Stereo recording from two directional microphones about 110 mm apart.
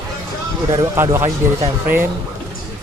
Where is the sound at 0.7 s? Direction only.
30° right (ahead or behind).